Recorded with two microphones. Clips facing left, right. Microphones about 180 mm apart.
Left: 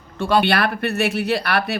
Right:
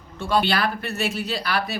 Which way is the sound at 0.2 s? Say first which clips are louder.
Left 4 dB; 70° left (ahead or behind).